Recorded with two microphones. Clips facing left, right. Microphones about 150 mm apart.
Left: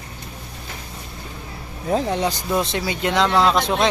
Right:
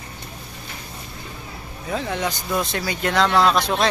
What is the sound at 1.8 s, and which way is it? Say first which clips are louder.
Speech: left 5 dB; 35° left (ahead or behind).